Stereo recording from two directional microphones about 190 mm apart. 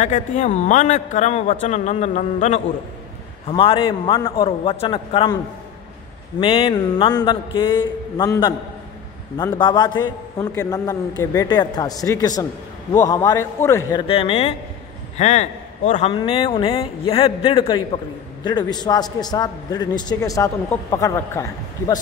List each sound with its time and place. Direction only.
0.0 s a man's voice: 40° left (ahead or behind)
6.4 s a man's voice: 25° left (ahead or behind)
14.0 s a man's voice: 30° left (ahead or behind)